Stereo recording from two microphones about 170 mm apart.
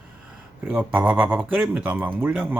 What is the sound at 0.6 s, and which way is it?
Speech, 10° right (ahead or behind).